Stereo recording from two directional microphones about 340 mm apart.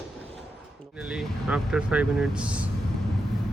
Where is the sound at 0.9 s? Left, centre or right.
Centre.